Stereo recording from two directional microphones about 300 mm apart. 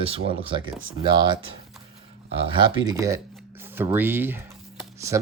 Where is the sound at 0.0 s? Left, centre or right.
Centre.